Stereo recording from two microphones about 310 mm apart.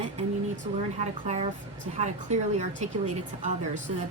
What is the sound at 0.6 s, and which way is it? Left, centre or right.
A woman's voice, right.